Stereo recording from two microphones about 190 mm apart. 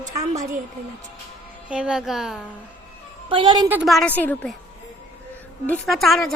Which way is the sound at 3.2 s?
25° right (ahead or behind).